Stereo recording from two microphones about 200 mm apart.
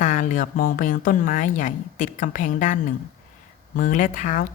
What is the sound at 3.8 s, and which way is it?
Speech, 40° left (ahead or behind).